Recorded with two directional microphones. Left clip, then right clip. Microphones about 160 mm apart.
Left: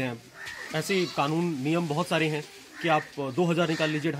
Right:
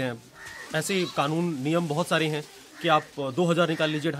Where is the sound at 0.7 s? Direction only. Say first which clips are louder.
Right 1 dB; 30° right (ahead or behind).